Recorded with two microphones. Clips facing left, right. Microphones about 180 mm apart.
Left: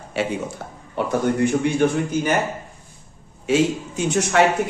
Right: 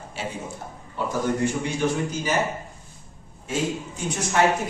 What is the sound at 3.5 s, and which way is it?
Speech, 80° left.